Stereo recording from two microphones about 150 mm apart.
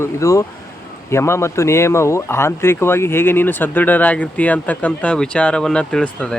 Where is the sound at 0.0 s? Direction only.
20° left (ahead or behind).